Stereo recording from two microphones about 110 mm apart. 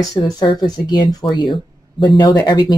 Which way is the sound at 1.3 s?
45° left (ahead or behind).